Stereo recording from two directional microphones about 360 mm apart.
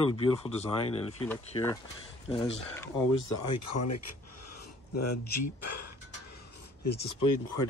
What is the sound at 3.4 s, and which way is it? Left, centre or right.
Speech, left.